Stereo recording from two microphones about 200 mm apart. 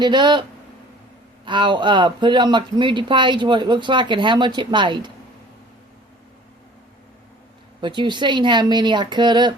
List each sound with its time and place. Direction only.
0.0 s speech: 20° right (ahead or behind)
1.5 s speech: 25° right (ahead or behind)
7.8 s speech: 20° right (ahead or behind)